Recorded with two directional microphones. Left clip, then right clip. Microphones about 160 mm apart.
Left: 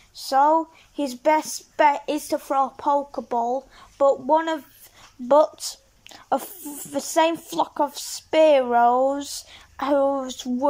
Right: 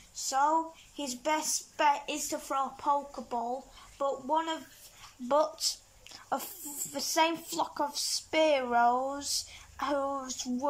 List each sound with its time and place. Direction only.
0.1 s a woman's voice: 30° left (ahead or behind)